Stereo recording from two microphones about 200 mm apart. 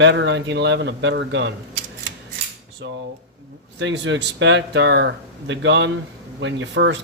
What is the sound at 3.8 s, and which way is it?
Speech, 65° right (ahead or behind).